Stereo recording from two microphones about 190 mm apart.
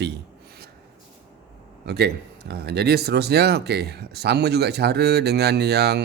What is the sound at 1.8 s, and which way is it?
Speech, 60° right (ahead or behind).